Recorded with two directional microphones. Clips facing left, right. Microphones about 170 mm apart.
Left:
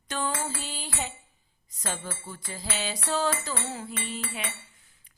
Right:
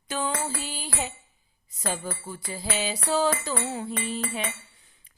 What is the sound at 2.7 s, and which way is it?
Music, 10° right (ahead or behind).